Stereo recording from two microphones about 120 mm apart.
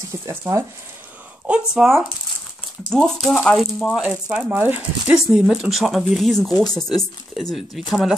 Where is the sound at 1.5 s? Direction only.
5° right (ahead or behind).